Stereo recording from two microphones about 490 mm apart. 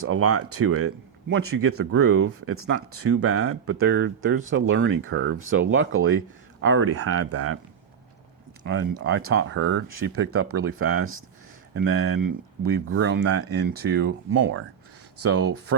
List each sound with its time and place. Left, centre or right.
0.0 s speech: right
8.6 s speech: right